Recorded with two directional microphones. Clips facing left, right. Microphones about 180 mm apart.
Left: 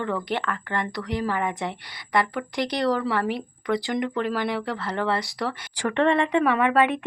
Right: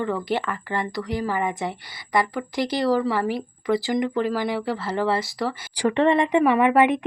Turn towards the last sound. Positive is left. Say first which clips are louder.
# right 3 dB
turn(degrees=-15)  # may be behind; listen again after turning